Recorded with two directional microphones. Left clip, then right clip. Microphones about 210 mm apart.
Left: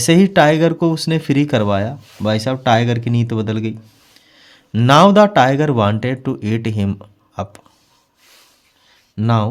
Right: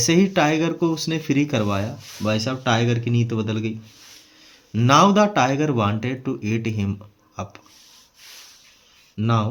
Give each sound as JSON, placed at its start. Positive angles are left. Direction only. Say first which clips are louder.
{"t": 0.0, "sound": "speech", "louder": "left 7 dB", "side_deg": 55}
{"t": 9.1, "sound": "speech", "louder": "left 5 dB", "side_deg": 60}